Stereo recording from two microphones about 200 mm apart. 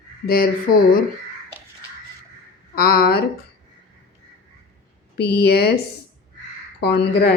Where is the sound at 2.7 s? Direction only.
50° left (ahead or behind).